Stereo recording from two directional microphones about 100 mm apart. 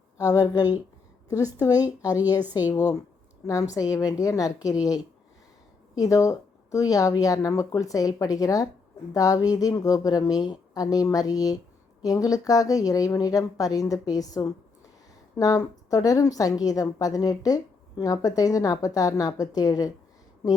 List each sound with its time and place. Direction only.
0.2 s a woman's voice: 35° left (ahead or behind)